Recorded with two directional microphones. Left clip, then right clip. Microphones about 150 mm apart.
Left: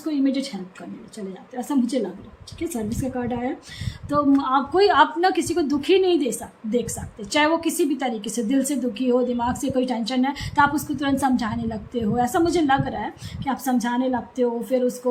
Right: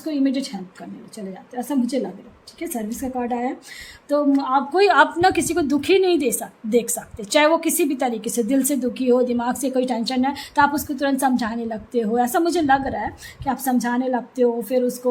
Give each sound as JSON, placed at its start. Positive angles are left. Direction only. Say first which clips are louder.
{"t": 0.0, "sound": "a woman's voice", "louder": "right 1 dB", "side_deg": -30}
{"t": 6.7, "sound": "a woman's voice", "louder": "right 5 dB", "side_deg": -55}